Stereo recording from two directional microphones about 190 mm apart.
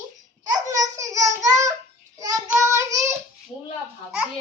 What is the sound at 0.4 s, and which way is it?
Babbling, 20° right (ahead or behind).